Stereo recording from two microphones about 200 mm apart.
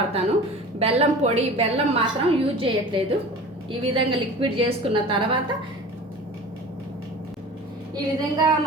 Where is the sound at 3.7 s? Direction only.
25° right (ahead or behind).